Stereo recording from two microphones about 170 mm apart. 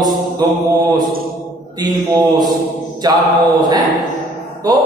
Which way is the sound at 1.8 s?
25° right (ahead or behind).